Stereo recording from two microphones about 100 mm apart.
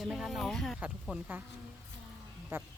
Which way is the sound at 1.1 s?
10° right (ahead or behind).